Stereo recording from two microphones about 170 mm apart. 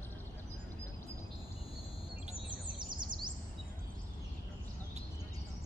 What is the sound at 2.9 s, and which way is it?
Bird vocalization, 25° right (ahead or behind).